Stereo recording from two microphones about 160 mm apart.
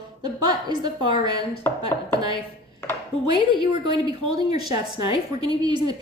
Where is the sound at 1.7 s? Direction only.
15° left (ahead or behind).